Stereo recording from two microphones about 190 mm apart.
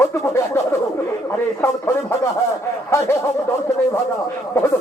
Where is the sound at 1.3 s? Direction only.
15° left (ahead or behind).